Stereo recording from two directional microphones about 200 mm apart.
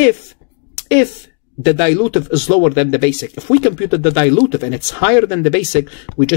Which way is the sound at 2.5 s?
10° left (ahead or behind).